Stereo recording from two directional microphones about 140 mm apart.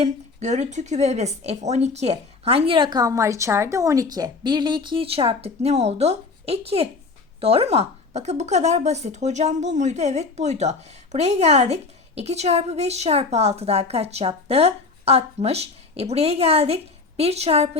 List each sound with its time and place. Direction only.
0.0 s speech: 55° right (ahead or behind)